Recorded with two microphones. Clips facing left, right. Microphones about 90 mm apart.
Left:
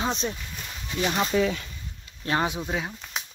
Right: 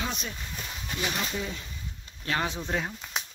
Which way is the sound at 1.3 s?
90° left.